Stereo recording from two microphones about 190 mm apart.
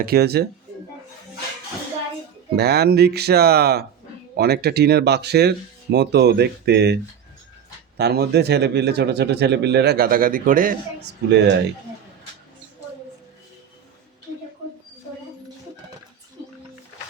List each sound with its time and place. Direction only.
0.0 s speech: 55° right (ahead or behind)
2.6 s speech: 55° right (ahead or behind)
11.0 s speech: 65° right (ahead or behind)